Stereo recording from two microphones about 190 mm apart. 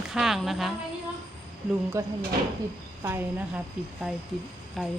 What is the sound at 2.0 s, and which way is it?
Speech, 15° right (ahead or behind).